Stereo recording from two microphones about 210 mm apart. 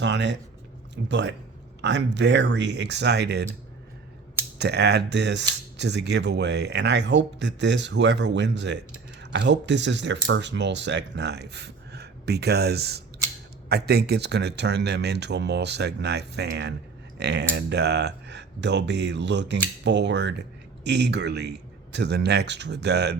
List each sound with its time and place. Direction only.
0.0 s speech: 55° right (ahead or behind)
4.5 s speech: 55° right (ahead or behind)